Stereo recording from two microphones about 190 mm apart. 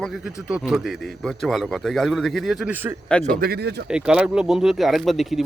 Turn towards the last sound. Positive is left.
turn(degrees=0)  # may be behind; listen again after turning